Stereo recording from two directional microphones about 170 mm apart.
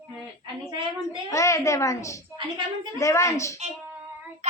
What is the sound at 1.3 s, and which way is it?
A child's voice, 20° left (ahead or behind).